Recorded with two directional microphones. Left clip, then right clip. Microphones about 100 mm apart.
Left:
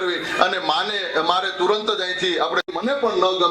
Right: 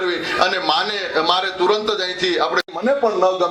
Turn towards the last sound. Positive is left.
turn(degrees=-20)  # may be behind; listen again after turning